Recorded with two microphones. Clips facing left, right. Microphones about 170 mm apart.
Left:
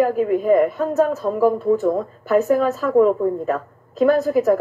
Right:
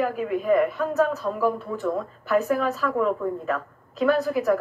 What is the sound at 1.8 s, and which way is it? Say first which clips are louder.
A man's voice: left 6 dB; 40° left (ahead or behind).